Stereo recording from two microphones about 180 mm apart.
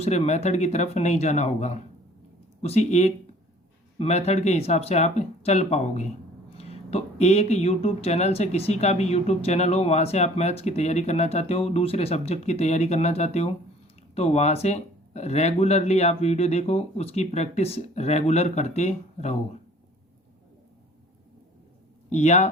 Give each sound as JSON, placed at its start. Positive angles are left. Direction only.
{"t": 0.0, "sound": "speech", "side_deg": 35}
{"t": 22.1, "sound": "speech", "side_deg": 40}